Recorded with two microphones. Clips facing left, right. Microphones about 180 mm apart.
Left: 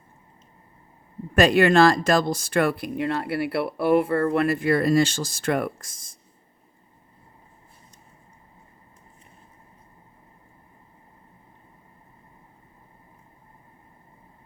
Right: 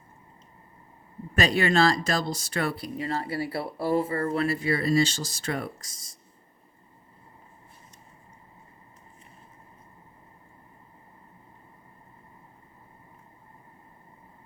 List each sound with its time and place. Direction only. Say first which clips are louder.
1.4 s speech: left 6 dB; 55° left (ahead or behind)